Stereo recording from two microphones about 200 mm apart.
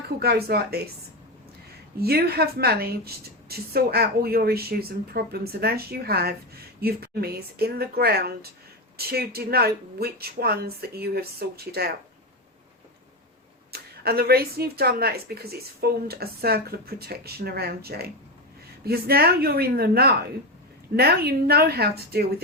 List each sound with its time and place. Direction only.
0.2 s speech: 50° right (ahead or behind)
2.0 s speech: 50° right (ahead or behind)
13.7 s speech: 50° right (ahead or behind)